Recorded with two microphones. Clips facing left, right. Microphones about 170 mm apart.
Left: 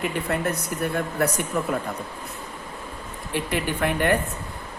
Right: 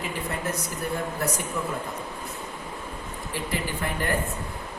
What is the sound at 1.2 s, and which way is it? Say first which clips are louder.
Speech: left 5 dB; 65° left (ahead or behind).